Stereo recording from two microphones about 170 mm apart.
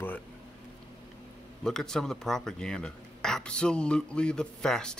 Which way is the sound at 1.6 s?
5° left (ahead or behind).